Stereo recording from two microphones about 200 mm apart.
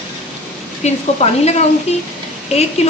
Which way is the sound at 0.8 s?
30° left (ahead or behind).